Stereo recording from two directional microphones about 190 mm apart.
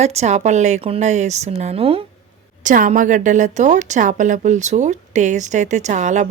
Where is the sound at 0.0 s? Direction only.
35° right (ahead or behind).